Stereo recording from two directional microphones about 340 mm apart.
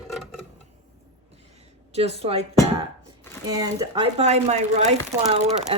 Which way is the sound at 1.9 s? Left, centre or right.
Centre.